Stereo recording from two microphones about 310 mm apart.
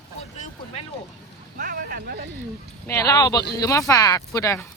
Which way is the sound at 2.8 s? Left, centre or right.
Centre.